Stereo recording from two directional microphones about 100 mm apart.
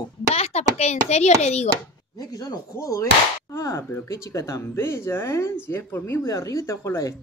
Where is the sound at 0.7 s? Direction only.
90° left.